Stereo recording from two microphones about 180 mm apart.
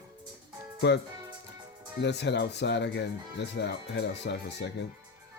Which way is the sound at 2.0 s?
70° left (ahead or behind).